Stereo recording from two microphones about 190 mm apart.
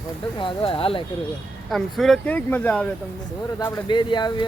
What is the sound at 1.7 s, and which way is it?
Speech, centre (ahead or behind).